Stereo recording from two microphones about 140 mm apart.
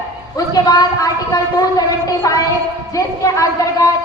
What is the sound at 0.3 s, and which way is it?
A woman's voice, 25° left (ahead or behind).